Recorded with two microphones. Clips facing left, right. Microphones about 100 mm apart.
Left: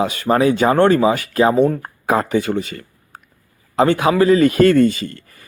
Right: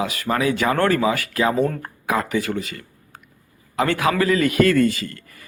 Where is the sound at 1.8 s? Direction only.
30° left (ahead or behind).